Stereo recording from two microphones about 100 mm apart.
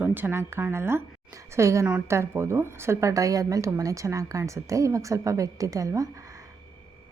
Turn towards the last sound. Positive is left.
turn(degrees=-30)  # may be behind; listen again after turning